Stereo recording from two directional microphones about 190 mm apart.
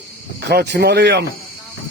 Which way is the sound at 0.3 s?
60° right (ahead or behind).